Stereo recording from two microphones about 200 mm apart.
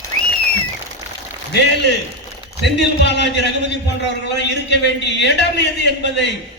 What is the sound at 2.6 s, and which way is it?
A man's voice, 60° left (ahead or behind).